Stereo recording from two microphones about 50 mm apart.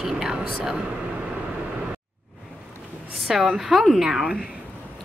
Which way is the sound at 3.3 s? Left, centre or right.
Centre.